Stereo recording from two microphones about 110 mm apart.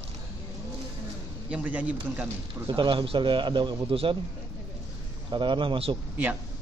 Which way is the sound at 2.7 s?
50° right (ahead or behind).